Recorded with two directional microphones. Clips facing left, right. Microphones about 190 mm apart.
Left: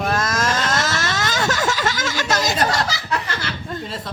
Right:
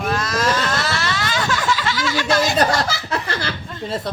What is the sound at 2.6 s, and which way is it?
Laughter, 35° right (ahead or behind).